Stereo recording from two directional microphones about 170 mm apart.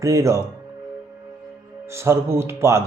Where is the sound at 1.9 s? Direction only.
15° right (ahead or behind).